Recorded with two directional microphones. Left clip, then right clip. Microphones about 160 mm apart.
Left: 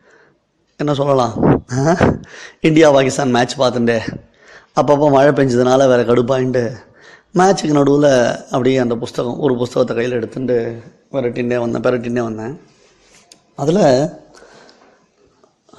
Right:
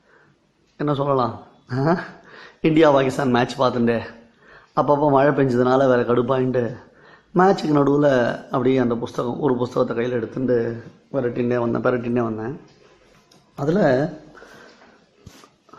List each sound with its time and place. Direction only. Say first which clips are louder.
0.8 s a man's voice: left 6 dB; 25° left (ahead or behind)
13.6 s a man's voice: left 6 dB; 20° left (ahead or behind)